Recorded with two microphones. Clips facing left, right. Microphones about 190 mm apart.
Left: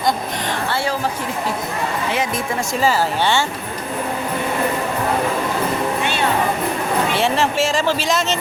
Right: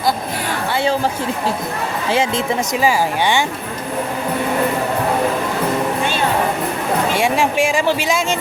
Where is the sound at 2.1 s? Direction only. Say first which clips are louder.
Right 7 dB; 25° right (ahead or behind).